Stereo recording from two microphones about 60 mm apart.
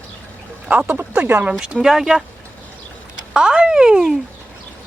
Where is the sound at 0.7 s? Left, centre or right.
Right.